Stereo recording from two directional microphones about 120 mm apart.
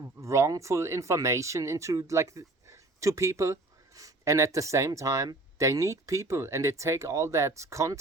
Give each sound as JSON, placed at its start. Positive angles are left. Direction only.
{"t": 0.2, "sound": "speech", "side_deg": -25}